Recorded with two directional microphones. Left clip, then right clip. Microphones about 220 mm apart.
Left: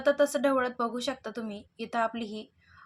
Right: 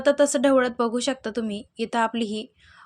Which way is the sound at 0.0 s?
40° right (ahead or behind).